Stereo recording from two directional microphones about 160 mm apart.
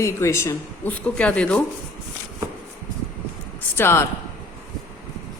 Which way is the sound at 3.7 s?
15° left (ahead or behind).